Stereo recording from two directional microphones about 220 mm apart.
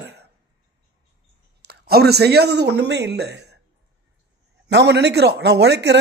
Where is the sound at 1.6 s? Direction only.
45° right (ahead or behind).